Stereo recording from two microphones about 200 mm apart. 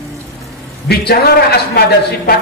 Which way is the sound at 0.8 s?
50° left (ahead or behind).